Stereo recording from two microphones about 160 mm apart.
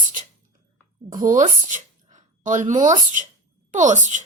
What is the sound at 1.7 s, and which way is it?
A woman's voice, 50° right (ahead or behind).